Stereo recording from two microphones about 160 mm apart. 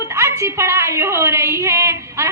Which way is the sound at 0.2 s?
15° right (ahead or behind).